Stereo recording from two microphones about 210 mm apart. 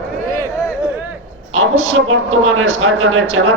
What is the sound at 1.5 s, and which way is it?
A woman's voice, 70° right (ahead or behind).